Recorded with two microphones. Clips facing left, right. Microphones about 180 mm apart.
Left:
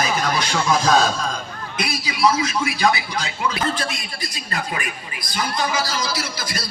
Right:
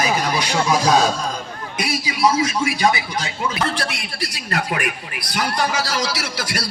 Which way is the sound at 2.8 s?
25° right (ahead or behind).